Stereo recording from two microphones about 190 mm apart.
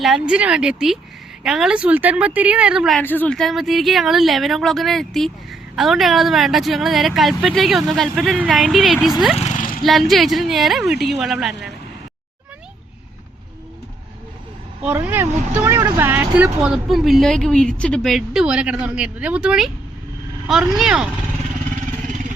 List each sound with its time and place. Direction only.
0.0 s speech: 5° right (ahead or behind)
3.0 s speech: 10° left (ahead or behind)
9.4 s a sound: 40° left (ahead or behind)
9.8 s speech: centre (ahead or behind)
14.8 s speech: 10° right (ahead or behind)
22.0 s vehicle: 40° right (ahead or behind)